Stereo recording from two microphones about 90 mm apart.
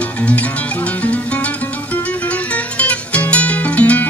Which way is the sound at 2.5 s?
15° left (ahead or behind).